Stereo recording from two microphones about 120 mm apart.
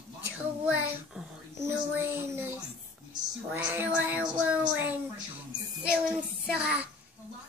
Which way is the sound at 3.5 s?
15° right (ahead or behind).